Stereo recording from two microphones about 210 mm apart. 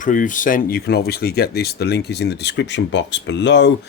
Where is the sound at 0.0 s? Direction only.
40° left (ahead or behind).